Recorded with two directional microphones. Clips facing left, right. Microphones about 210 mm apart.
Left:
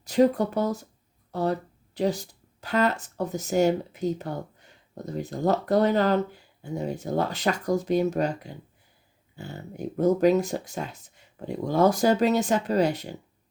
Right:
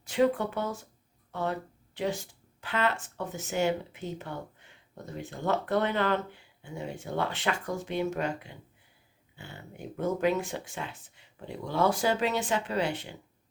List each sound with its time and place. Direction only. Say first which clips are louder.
0.0 s speech: left 5 dB; 40° left (ahead or behind)